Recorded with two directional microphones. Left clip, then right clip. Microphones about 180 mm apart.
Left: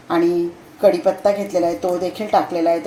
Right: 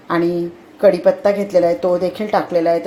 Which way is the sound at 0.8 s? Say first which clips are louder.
Right 2 dB; 15° right (ahead or behind).